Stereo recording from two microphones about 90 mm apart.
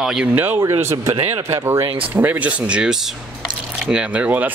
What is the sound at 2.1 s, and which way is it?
Speech, 20° right (ahead or behind).